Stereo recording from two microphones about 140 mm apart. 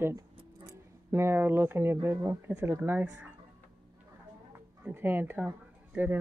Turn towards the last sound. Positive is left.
turn(degrees=-10)  # may be behind; listen again after turning